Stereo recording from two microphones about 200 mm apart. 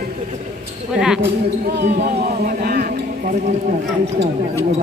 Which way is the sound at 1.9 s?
35° right (ahead or behind).